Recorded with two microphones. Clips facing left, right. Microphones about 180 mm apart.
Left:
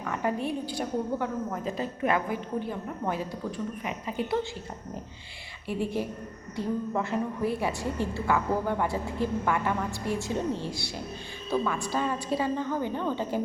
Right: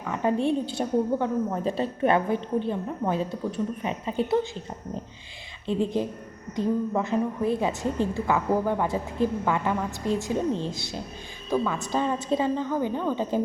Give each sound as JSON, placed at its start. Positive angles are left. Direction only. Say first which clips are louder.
{"t": 0.1, "sound": "a woman's voice", "louder": "right 6 dB", "side_deg": -25}
{"t": 5.6, "sound": "a woman's voice", "louder": "right 4 dB", "side_deg": -20}